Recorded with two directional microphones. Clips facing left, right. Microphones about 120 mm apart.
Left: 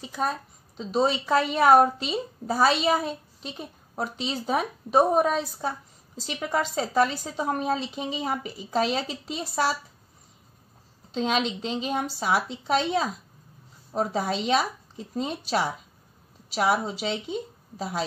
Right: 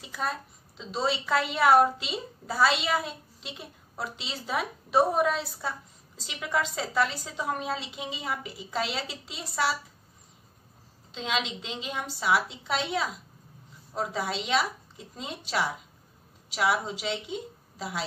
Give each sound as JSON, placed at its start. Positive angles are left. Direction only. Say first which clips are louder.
{"t": 0.0, "sound": "a woman's voice", "louder": "left 4 dB", "side_deg": 35}
{"t": 11.1, "sound": "a woman's voice", "louder": "left 6 dB", "side_deg": 45}
{"t": 16.5, "sound": "a woman's voice", "louder": "left 3 dB", "side_deg": 40}